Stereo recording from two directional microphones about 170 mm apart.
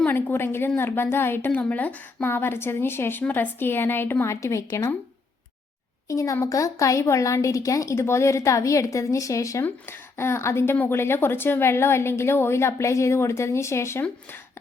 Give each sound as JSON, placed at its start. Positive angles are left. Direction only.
{"t": 0.0, "sound": "speech", "side_deg": 10}
{"t": 6.1, "sound": "speech", "side_deg": 20}